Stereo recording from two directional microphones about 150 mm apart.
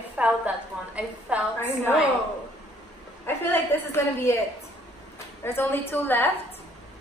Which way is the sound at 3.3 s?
15° left (ahead or behind).